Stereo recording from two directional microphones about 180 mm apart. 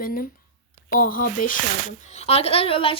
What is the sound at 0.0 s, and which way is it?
Speech, 50° left (ahead or behind).